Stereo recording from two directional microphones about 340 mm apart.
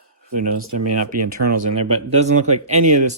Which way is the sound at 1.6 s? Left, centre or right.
Centre.